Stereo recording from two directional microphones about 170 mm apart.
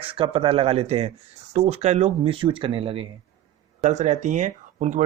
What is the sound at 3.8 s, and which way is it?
Speech, 45° right (ahead or behind).